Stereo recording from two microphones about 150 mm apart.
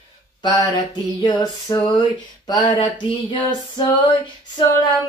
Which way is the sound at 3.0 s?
30° left (ahead or behind).